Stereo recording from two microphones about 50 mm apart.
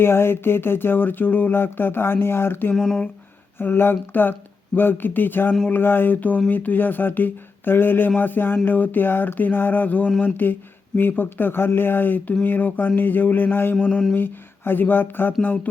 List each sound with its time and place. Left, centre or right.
0.0 s speech: left
2.7 s speech: centre
3.6 s speech: left
15.4 s speech: left